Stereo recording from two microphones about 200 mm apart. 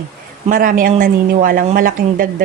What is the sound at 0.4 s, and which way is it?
A woman's voice, 45° right (ahead or behind).